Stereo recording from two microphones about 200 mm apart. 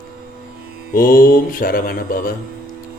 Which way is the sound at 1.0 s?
45° left (ahead or behind).